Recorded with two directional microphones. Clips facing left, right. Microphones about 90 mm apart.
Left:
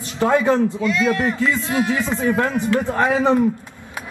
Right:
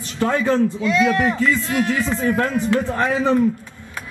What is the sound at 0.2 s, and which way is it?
A man's voice, 20° left (ahead or behind).